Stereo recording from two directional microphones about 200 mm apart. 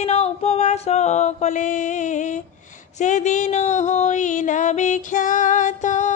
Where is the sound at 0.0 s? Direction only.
30° left (ahead or behind).